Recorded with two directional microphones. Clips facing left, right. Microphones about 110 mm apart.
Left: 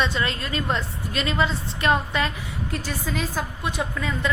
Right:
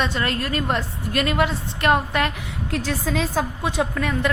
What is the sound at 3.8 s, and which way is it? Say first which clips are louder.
Speech: right 5 dB; 75° right (ahead or behind).